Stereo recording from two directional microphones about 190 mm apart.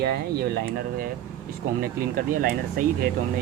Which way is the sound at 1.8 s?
50° right (ahead or behind).